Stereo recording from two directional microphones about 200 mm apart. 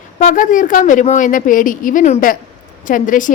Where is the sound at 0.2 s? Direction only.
40° left (ahead or behind).